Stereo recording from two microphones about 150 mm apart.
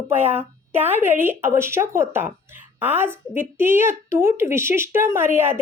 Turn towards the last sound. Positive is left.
turn(degrees=-15)  # may be behind; listen again after turning